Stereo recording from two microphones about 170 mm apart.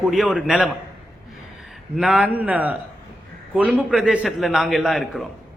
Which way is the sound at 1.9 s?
5° right (ahead or behind).